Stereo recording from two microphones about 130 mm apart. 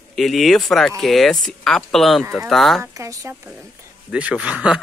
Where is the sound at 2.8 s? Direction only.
25° right (ahead or behind).